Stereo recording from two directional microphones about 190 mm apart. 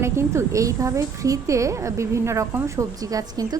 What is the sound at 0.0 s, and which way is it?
A woman's voice, 15° right (ahead or behind).